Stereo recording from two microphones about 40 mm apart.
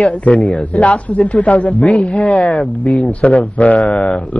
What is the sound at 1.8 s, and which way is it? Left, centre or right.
Speech, centre.